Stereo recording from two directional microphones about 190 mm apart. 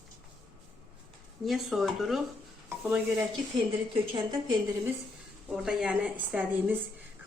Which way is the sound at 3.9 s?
25° right (ahead or behind).